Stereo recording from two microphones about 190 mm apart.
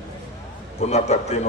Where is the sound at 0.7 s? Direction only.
35° left (ahead or behind).